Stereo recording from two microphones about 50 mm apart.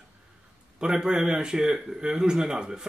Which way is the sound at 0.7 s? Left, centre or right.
Centre.